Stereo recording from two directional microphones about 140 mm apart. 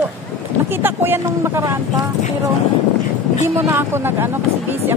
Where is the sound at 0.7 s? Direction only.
15° right (ahead or behind).